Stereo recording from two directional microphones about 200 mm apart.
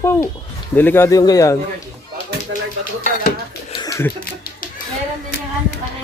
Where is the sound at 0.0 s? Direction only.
15° left (ahead or behind).